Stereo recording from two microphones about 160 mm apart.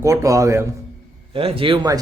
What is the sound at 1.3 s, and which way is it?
Speech, 35° right (ahead or behind).